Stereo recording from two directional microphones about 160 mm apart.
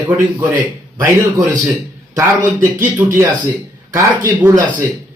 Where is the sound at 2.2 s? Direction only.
15° right (ahead or behind).